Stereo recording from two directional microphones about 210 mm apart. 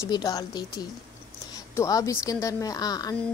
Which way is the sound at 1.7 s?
15° left (ahead or behind).